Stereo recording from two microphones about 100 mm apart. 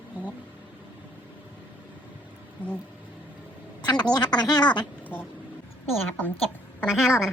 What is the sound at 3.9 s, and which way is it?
Speech, 45° left (ahead or behind).